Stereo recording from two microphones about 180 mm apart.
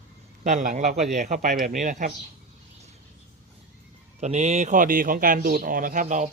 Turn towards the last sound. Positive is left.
turn(degrees=-45)  # may be behind; listen again after turning